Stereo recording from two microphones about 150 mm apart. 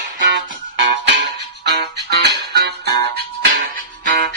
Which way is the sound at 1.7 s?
90° right.